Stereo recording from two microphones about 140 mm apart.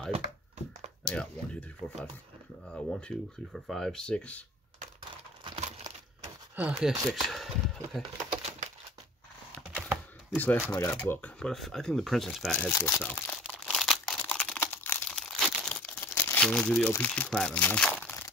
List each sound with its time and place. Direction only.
1.0 s a sound: 10° left (ahead or behind)
2.7 s speech: 5° left (ahead or behind)
5.6 s a sound: 50° right (ahead or behind)
6.5 s speech: 10° right (ahead or behind)
8.4 s crumpling: 55° right (ahead or behind)
10.3 s speech: 15° left (ahead or behind)
12.5 s speech: 10° left (ahead or behind)
13.7 s crumpling: centre (ahead or behind)
16.9 s speech: 10° left (ahead or behind)